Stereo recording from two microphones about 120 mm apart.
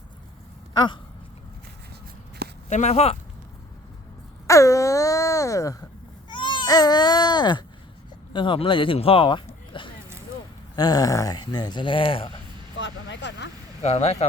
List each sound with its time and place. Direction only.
0.7 s speech: 40° left (ahead or behind)
2.6 s speech: 75° left (ahead or behind)
4.4 s wail: 25° left (ahead or behind)
6.2 s speech: 40° left (ahead or behind)
10.8 s speech: 35° left (ahead or behind); by 12.4 s 50° left (ahead or behind)
13.8 s speech: 65° left (ahead or behind)